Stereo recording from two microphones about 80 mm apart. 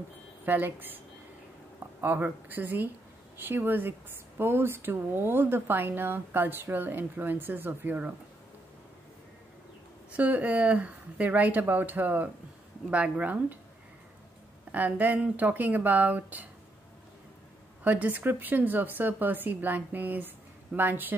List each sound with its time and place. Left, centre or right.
0.5 s speech: right
10.1 s speech: centre
14.7 s speech: right
17.8 s speech: centre